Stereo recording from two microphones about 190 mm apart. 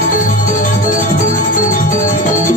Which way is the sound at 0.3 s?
45° left (ahead or behind).